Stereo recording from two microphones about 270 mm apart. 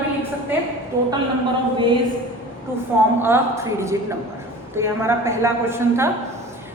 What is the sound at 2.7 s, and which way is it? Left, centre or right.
A woman's voice, centre.